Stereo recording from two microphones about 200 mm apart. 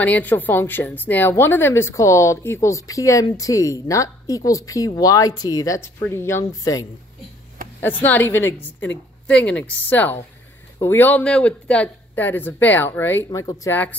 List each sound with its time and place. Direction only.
0.0 s a woman's voice: 10° left (ahead or behind)